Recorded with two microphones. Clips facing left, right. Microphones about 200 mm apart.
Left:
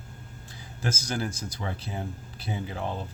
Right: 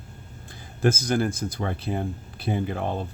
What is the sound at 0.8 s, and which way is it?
Speech, 55° right (ahead or behind).